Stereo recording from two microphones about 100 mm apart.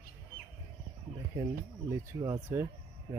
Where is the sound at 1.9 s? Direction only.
30° right (ahead or behind).